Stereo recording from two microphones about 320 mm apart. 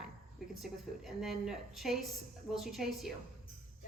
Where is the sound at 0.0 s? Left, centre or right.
Centre.